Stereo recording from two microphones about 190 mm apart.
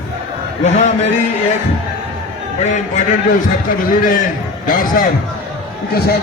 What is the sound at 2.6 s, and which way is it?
Speech, 40° left (ahead or behind).